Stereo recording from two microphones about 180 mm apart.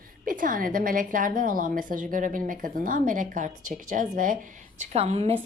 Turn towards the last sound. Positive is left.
turn(degrees=-35)  # may be behind; listen again after turning